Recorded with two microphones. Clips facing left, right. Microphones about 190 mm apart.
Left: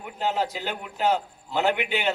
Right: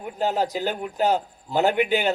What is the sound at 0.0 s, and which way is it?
A man's voice, 40° right (ahead or behind).